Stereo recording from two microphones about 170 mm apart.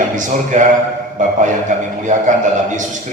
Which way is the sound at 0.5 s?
45° right (ahead or behind).